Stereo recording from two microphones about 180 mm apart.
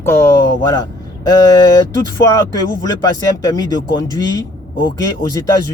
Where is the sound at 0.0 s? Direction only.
15° left (ahead or behind).